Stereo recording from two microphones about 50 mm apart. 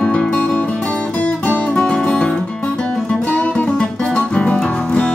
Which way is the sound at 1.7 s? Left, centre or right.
Centre.